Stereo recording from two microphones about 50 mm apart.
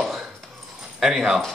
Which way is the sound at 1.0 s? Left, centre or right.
Centre.